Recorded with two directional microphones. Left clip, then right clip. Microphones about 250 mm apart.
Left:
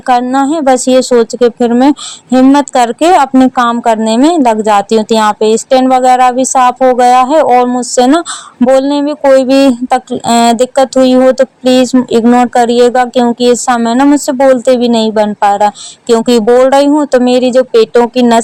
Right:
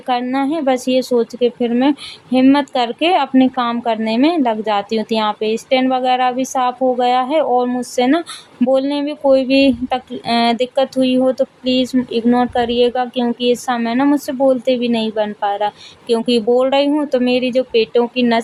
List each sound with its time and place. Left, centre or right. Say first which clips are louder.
0.1 s speech: left 9 dB; left
13.9 s a woman's voice: left 6 dB; centre
14.3 s speech: left 8 dB; left